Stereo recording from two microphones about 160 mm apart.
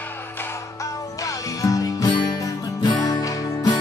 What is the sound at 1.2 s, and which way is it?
Music, 20° left (ahead or behind).